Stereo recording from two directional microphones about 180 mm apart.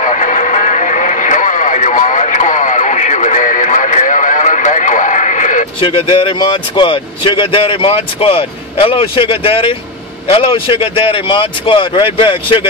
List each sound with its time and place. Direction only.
0.0 s radio: 45° left (ahead or behind)
5.8 s speech: 30° left (ahead or behind)